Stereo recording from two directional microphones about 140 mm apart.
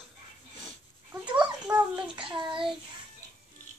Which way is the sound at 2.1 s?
35° right (ahead or behind).